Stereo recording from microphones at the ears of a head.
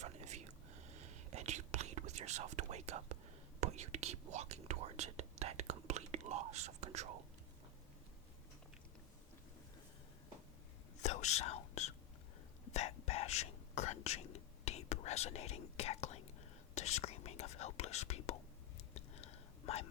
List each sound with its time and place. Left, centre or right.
0.0 s whispering: right
11.0 s whispering: left